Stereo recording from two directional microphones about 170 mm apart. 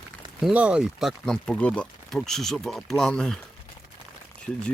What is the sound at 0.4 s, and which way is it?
Speech, 5° right (ahead or behind).